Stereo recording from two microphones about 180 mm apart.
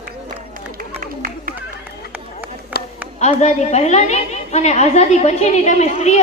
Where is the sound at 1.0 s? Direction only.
50° right (ahead or behind).